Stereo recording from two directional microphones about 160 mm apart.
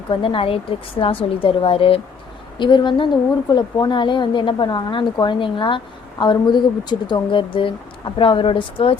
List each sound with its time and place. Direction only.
0.1 s a woman's voice: 30° left (ahead or behind)